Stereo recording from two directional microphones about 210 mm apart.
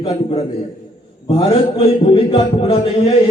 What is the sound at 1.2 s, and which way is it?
A man's voice, 25° left (ahead or behind).